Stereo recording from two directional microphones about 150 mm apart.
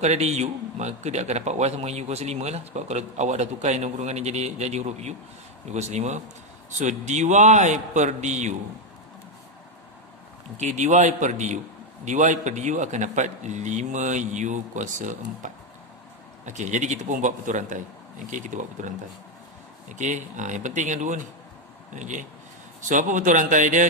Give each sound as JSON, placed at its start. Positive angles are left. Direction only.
{"t": 0.0, "sound": "a man's voice", "side_deg": -45}
{"t": 10.6, "sound": "a man's voice", "side_deg": -50}